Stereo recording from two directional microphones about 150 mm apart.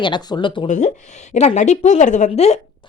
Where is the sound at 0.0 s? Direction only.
30° left (ahead or behind).